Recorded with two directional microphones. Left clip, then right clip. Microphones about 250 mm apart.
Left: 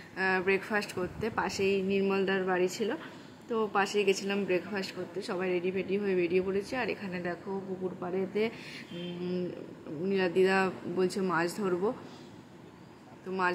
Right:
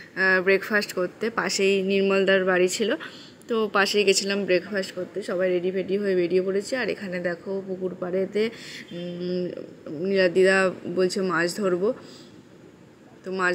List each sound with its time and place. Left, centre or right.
0.1 s speech: centre